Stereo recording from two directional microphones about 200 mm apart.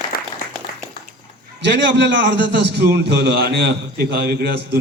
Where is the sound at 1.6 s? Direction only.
60° right (ahead or behind).